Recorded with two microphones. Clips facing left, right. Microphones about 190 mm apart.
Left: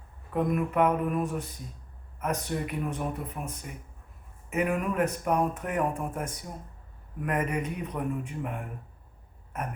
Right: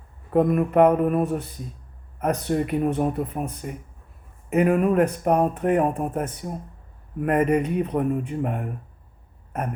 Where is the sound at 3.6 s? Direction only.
50° right (ahead or behind); by 5.9 s 30° right (ahead or behind).